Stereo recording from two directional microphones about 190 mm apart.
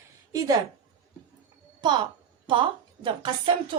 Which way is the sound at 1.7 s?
25° right (ahead or behind).